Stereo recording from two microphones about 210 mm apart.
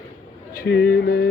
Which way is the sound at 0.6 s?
50° left (ahead or behind).